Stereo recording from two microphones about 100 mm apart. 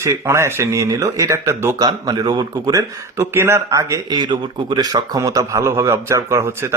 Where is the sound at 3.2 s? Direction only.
25° right (ahead or behind).